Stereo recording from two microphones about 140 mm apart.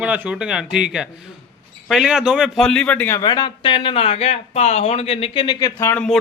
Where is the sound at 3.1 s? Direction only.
30° left (ahead or behind).